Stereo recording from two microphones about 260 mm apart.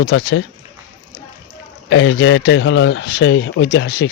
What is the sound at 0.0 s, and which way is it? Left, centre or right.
Speech, left.